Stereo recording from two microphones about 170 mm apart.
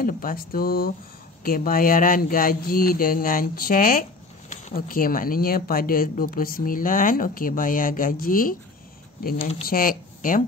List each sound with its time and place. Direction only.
0.0 s speech: 55° left (ahead or behind)
9.7 s speech: 55° left (ahead or behind)